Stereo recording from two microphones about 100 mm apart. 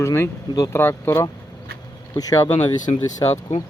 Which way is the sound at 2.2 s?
35° left (ahead or behind).